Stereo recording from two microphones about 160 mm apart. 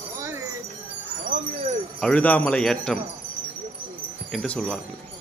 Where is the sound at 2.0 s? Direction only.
10° left (ahead or behind).